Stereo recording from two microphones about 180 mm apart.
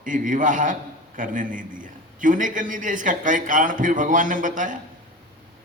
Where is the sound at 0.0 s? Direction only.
45° right (ahead or behind).